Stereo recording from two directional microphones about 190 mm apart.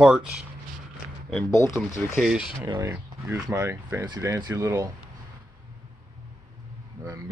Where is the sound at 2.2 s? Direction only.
5° right (ahead or behind).